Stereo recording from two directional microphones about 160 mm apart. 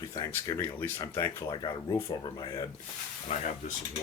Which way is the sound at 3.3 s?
40° left (ahead or behind).